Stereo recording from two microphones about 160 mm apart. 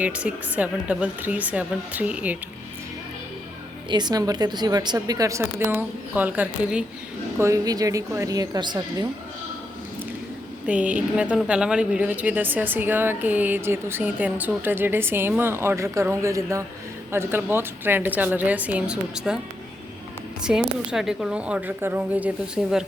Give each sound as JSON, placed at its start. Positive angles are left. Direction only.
{"t": 0.0, "sound": "a woman's voice", "side_deg": -5}
{"t": 3.8, "sound": "a woman's voice", "side_deg": -25}
{"t": 7.3, "sound": "a woman's voice", "side_deg": -20}
{"t": 10.7, "sound": "a woman's voice", "side_deg": -10}
{"t": 20.4, "sound": "a woman's voice", "side_deg": -5}